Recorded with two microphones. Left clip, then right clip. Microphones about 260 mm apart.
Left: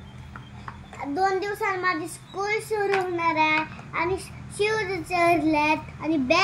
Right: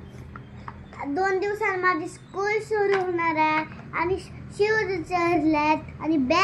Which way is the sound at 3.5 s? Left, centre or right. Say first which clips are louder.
Left 1 dB; centre.